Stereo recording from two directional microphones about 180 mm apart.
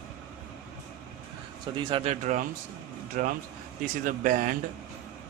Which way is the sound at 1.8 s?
30° right (ahead or behind).